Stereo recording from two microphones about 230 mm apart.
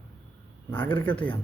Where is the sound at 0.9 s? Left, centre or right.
Centre.